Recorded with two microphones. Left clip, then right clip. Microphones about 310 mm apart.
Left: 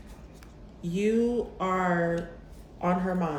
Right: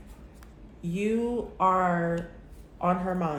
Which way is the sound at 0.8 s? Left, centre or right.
Centre.